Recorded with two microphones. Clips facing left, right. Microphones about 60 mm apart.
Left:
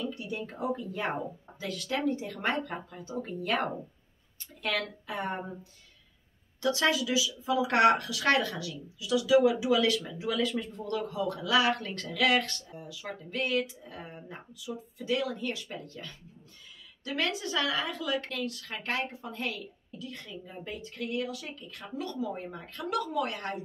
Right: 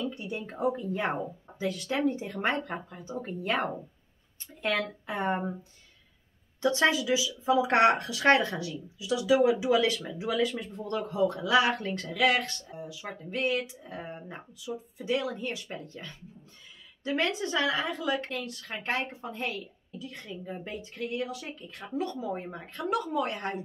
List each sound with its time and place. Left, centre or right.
0.1 s a sound: right
1.6 s speech: centre
6.6 s speech: right